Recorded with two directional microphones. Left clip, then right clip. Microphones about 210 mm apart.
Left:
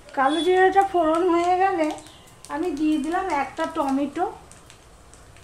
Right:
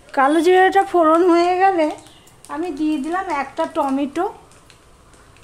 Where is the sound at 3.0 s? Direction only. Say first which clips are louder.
Right 2 dB; 50° right (ahead or behind).